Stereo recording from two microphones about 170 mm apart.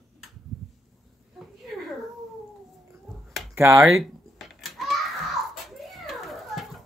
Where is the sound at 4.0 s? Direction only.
Centre (ahead or behind).